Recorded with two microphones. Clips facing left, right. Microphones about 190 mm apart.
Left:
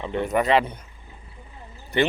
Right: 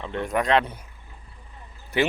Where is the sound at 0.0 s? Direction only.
Centre (ahead or behind).